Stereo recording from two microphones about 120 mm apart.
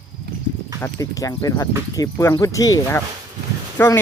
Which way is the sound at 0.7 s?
25° left (ahead or behind).